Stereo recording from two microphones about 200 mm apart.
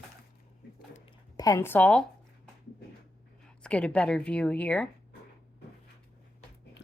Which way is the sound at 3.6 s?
5° left (ahead or behind).